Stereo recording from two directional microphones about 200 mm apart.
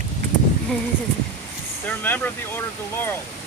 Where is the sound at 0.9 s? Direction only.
20° right (ahead or behind).